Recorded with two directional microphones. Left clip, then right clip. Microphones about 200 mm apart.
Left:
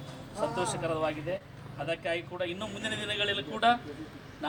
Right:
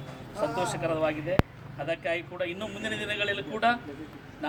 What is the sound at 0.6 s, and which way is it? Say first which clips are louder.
A man's voice: right 3 dB; centre (ahead or behind).